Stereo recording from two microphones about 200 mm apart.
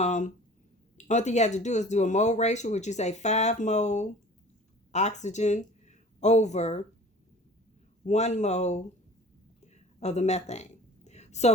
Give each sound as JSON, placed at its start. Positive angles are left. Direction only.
{"t": 0.0, "sound": "speech", "side_deg": 35}
{"t": 8.0, "sound": "speech", "side_deg": 35}
{"t": 9.7, "sound": "a sound", "side_deg": 35}